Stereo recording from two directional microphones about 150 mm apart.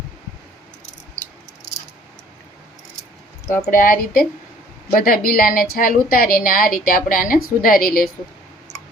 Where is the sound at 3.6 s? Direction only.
70° left (ahead or behind).